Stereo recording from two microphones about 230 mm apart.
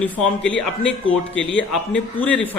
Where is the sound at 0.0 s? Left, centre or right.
Centre.